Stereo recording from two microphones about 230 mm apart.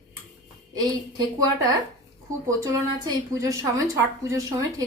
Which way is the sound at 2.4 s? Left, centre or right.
Centre.